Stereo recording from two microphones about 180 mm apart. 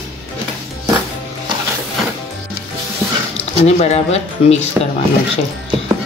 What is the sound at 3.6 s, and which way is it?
Speech, 35° left (ahead or behind).